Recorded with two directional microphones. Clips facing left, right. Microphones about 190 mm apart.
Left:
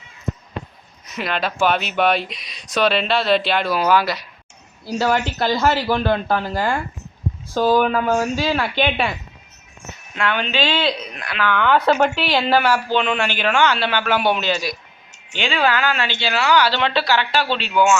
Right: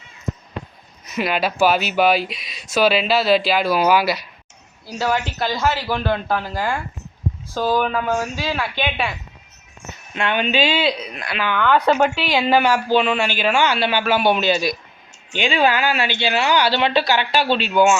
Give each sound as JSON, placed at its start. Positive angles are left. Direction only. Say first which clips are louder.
{"t": 1.1, "sound": "a man's voice", "louder": "right 3 dB", "side_deg": -5}
{"t": 7.8, "sound": "speech", "louder": "left 3 dB", "side_deg": 5}
{"t": 8.5, "sound": "a man's voice", "louder": "left 4 dB", "side_deg": -10}
{"t": 10.2, "sound": "a man's voice", "louder": "right 2 dB", "side_deg": -20}